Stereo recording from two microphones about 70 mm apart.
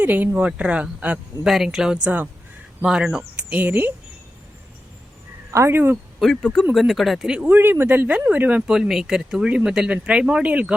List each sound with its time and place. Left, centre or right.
0.0 s speech: right
1.5 s speech: centre
3.5 s speech: right
5.5 s speech: right
6.3 s speech: centre
7.4 s speech: right
8.7 s speech: centre